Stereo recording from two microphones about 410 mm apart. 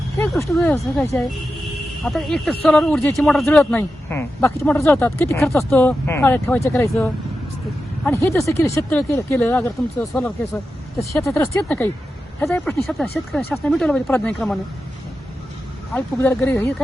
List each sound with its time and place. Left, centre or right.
0.2 s speech: centre
15.9 s speech: centre